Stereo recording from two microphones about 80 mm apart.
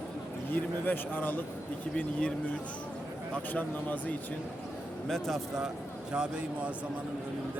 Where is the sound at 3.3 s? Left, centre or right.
Left.